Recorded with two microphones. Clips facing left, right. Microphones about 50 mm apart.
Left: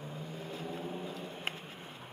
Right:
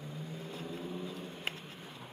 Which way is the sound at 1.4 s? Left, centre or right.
Left.